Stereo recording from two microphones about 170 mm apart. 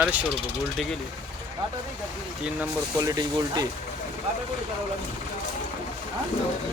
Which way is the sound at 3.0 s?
20° right (ahead or behind).